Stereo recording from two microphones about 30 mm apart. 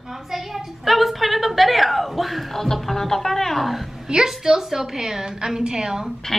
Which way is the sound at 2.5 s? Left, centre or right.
Centre.